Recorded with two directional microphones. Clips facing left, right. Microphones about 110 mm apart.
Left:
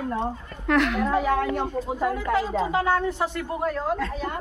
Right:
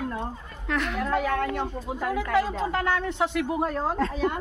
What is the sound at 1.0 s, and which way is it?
Speech, 15° left (ahead or behind).